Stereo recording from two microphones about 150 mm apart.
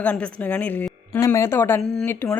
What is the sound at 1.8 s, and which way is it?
Speech, 5° left (ahead or behind).